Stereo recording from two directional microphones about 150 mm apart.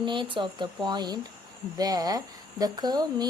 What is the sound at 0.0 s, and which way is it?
A woman's voice, 30° right (ahead or behind).